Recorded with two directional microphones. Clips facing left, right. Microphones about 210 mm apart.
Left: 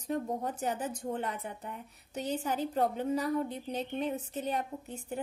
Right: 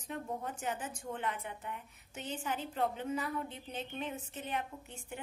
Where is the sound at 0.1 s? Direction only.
40° left (ahead or behind).